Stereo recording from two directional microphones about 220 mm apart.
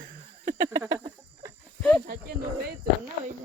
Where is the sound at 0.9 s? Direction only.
15° right (ahead or behind).